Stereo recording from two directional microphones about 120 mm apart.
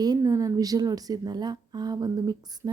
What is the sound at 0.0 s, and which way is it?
A woman's voice, 30° right (ahead or behind).